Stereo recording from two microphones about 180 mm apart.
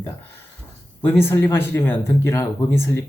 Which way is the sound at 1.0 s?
15° left (ahead or behind).